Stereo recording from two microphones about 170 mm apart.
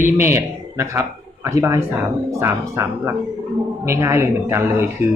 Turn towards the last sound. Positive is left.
turn(degrees=-15)  # may be behind; listen again after turning